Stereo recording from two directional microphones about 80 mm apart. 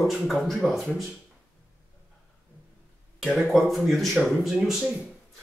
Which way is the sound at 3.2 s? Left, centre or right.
Centre.